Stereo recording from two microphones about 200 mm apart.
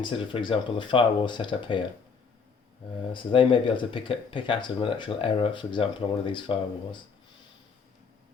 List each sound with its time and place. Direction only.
0.0 s speech: 25° left (ahead or behind)
3.1 s speech: 25° left (ahead or behind)